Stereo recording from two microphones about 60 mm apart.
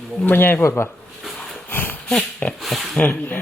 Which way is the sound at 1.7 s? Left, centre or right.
Left.